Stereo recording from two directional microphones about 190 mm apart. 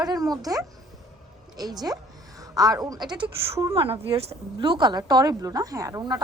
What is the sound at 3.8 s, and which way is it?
A woman's voice, 30° right (ahead or behind).